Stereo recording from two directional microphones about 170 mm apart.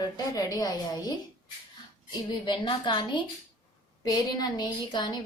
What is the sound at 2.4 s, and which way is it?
A woman's voice, 30° left (ahead or behind).